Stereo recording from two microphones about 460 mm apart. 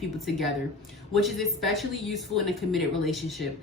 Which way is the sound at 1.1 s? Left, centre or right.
Centre.